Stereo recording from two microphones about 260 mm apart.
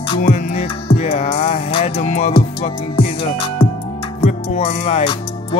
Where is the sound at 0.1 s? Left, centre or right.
Left.